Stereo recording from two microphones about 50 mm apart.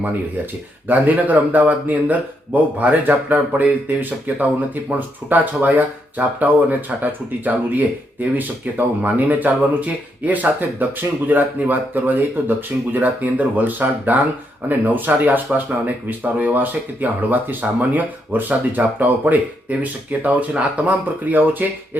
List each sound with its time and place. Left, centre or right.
0.9 s speech: right